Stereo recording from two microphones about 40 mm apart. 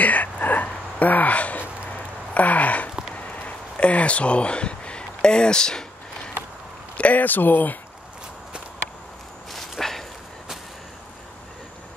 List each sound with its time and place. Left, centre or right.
0.0 s a sound: left; by 6.3 s centre
7.0 s speech: left
7.2 s speech: left
9.5 s walk: centre